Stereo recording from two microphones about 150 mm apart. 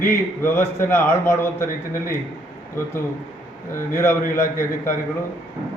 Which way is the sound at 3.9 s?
15° left (ahead or behind).